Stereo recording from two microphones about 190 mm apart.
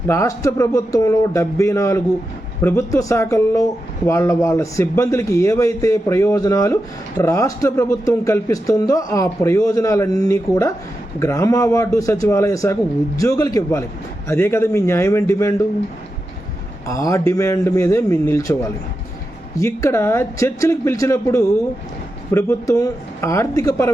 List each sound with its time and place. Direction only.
0.1 s speech: 15° left (ahead or behind)
16.8 s speech: 15° left (ahead or behind)